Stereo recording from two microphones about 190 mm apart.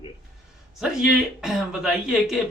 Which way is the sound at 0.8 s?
Centre (ahead or behind).